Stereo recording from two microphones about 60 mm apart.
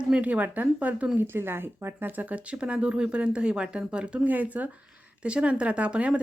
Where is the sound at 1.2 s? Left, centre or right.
Right.